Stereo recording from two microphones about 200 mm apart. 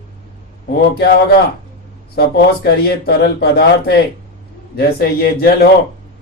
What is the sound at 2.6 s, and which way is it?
Speech, 55° left (ahead or behind).